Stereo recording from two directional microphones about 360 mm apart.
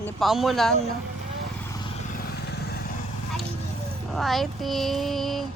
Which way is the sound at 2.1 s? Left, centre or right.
Left.